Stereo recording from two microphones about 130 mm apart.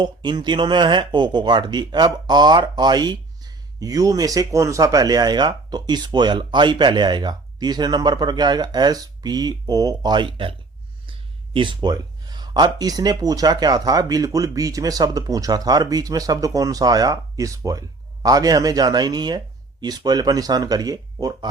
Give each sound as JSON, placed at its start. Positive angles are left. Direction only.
{"t": 0.0, "sound": "speech", "side_deg": -35}